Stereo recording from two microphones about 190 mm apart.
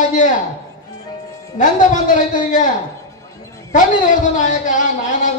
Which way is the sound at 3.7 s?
40° left (ahead or behind).